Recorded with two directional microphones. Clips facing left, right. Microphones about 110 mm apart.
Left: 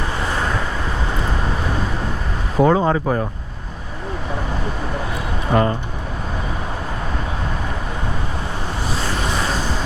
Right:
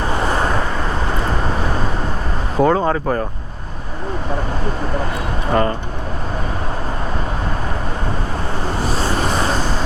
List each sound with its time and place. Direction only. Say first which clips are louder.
0.2 s vehicle: right 4 dB; 35° right (ahead or behind)
2.6 s speech: even; 5° left (ahead or behind)
5.5 s speech: even; 10° left (ahead or behind)
9.0 s vehicle: right 3 dB; 35° right (ahead or behind)